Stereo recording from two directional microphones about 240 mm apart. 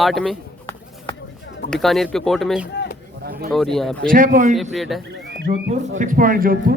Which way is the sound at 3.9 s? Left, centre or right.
Right.